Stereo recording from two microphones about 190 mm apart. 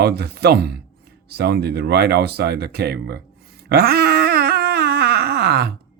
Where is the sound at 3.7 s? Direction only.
55° right (ahead or behind).